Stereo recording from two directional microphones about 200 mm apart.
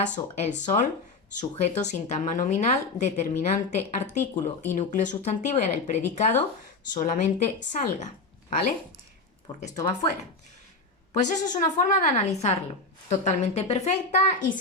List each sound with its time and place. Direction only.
0.0 s speech: 35° left (ahead or behind)
9.6 s speech: 35° left (ahead or behind)
11.2 s speech: 35° left (ahead or behind)